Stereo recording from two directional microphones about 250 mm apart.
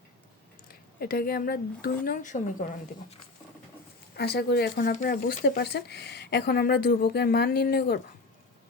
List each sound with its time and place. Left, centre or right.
0.9 s speech: left
4.2 s speech: left